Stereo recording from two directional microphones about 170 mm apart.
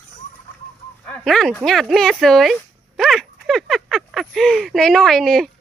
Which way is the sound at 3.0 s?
Centre (ahead or behind).